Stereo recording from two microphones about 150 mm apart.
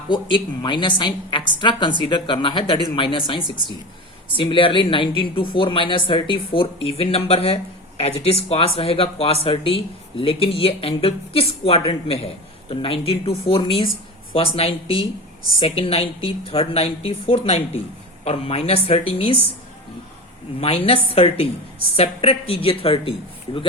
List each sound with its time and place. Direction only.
0.1 s speech: 30° left (ahead or behind)
20.6 s speech: 45° left (ahead or behind)